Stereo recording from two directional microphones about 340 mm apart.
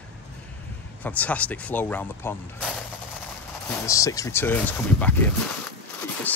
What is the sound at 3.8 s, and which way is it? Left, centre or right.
Speech, centre.